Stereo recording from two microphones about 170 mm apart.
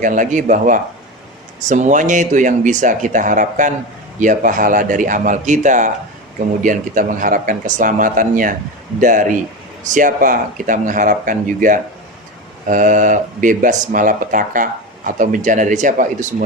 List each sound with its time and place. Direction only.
0.0 s speech: 50° right (ahead or behind)